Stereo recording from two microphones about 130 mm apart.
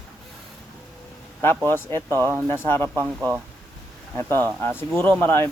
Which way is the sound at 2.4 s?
15° left (ahead or behind).